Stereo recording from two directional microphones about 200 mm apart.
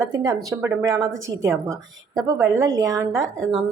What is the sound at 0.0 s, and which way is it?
Speech, 20° right (ahead or behind).